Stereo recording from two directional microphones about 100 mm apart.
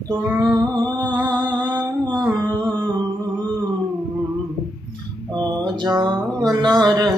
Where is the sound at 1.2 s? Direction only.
50° right (ahead or behind).